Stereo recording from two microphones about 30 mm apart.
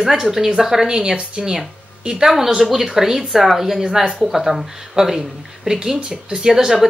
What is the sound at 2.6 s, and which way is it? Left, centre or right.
A woman's voice, centre.